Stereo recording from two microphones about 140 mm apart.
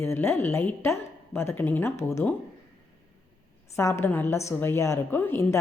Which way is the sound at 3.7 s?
20° left (ahead or behind).